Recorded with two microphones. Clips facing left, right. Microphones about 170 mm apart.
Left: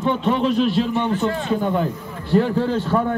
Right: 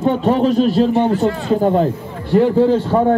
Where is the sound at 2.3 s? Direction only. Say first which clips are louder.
Right 6 dB; 20° right (ahead or behind).